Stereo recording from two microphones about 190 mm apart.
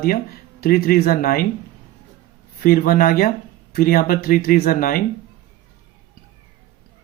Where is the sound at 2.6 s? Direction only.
50° left (ahead or behind).